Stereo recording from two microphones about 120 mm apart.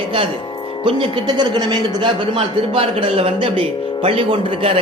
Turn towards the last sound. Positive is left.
turn(degrees=-50)  # may be behind; listen again after turning